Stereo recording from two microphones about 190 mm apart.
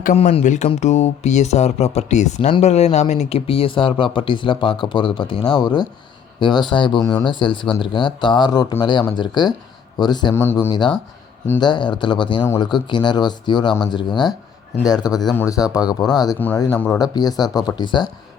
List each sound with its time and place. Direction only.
0.0 s a man's voice: 35° left (ahead or behind); by 10.7 s 15° left (ahead or behind)
10.7 s a man's voice: 25° left (ahead or behind)